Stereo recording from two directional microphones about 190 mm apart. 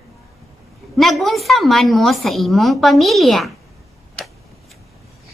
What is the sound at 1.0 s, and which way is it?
A woman's voice, centre (ahead or behind).